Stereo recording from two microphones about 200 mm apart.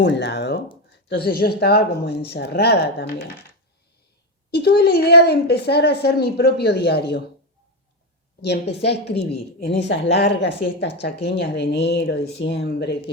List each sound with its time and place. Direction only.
0.0 s a woman's voice: 55° left (ahead or behind)
4.5 s a woman's voice: 50° left (ahead or behind)
8.4 s a woman's voice: 55° left (ahead or behind)